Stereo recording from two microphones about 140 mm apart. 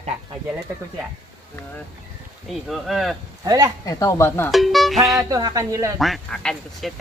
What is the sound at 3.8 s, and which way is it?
Speech, 25° left (ahead or behind).